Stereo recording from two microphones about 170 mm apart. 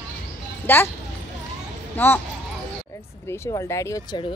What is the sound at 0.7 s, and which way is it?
Speech, 10° left (ahead or behind).